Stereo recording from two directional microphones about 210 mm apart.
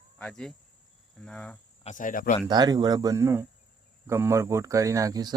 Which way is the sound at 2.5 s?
20° right (ahead or behind).